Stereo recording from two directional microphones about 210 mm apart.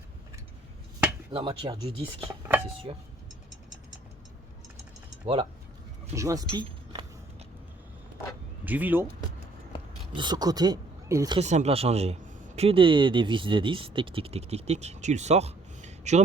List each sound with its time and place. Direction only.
1.3 s speech: 25° right (ahead or behind)
5.2 s speech: 25° right (ahead or behind)
6.1 s a sound: 15° right (ahead or behind)
8.6 s speech: 10° right (ahead or behind)
10.2 s speech: 20° right (ahead or behind)
11.3 s speech: 30° right (ahead or behind)